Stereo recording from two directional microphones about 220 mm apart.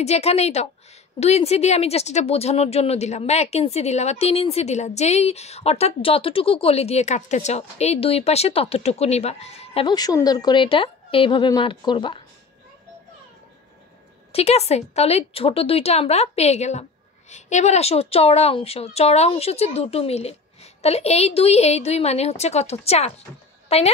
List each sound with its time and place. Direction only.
0.0 s speech: 30° left (ahead or behind)
14.3 s speech: 30° left (ahead or behind)